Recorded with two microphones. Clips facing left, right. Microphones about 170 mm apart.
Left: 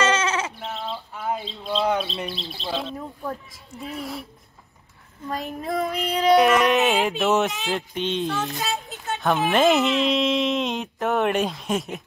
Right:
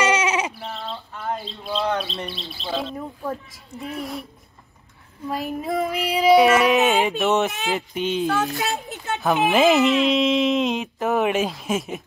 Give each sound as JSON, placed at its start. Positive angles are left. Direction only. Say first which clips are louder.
{"t": 0.0, "sound": "sheep", "louder": "right 2 dB", "side_deg": -15}
{"t": 0.6, "sound": "bird", "louder": "left 1 dB", "side_deg": 0}
{"t": 1.9, "sound": "speech", "louder": "left 1 dB", "side_deg": 5}
{"t": 5.3, "sound": "speech", "louder": "right 2 dB", "side_deg": -5}
{"t": 8.5, "sound": "a sound", "louder": "right 2 dB", "side_deg": -65}
{"t": 9.2, "sound": "speech", "louder": "right 2 dB", "side_deg": 0}